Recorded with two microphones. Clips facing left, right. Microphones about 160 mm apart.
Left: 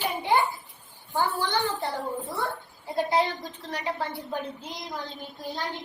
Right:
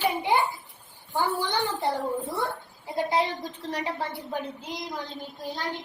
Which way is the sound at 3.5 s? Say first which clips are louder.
Right 1 dB; 30° right (ahead or behind).